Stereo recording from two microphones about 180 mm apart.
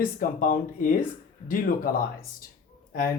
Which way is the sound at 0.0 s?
50° left (ahead or behind).